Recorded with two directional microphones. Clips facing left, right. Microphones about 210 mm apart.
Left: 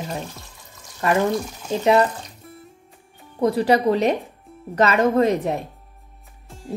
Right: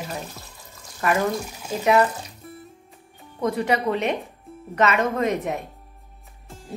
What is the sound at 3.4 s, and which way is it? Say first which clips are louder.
A woman's voice: left 5 dB; 35° left (ahead or behind).